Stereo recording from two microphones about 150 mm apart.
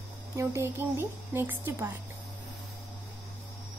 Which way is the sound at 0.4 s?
20° right (ahead or behind).